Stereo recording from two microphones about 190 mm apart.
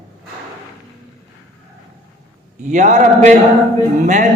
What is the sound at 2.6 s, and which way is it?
Speech, 40° right (ahead or behind).